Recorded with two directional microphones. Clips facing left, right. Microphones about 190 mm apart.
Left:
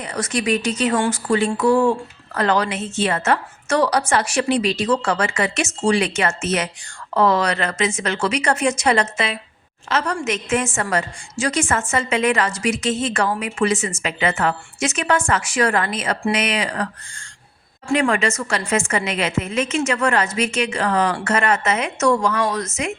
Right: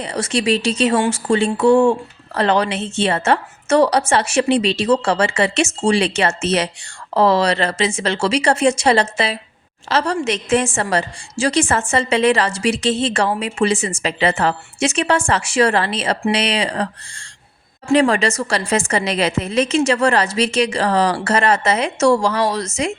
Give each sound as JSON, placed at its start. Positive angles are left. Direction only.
{"t": 0.0, "sound": "a woman's voice", "side_deg": -30}